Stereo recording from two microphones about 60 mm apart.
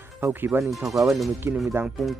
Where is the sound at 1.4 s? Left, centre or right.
Right.